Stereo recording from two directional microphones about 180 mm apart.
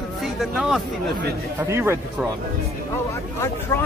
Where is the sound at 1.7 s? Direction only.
15° right (ahead or behind).